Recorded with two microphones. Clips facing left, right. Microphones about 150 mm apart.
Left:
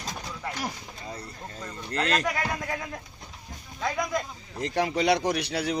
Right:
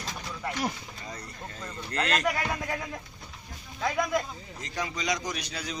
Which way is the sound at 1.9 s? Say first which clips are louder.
Left 2 dB; 35° left (ahead or behind).